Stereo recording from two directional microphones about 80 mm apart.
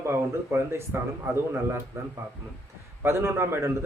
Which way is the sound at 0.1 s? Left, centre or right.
Right.